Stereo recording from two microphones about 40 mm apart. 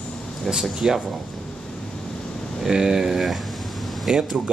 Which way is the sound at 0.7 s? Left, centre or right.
Centre.